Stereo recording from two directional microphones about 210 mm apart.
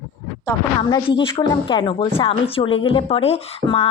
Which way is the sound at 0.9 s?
25° left (ahead or behind).